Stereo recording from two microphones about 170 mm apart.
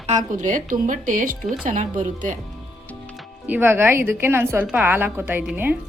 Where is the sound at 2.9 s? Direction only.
5° left (ahead or behind).